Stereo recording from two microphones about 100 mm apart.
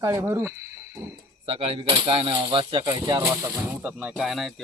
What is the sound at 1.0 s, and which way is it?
Speech, 45° right (ahead or behind).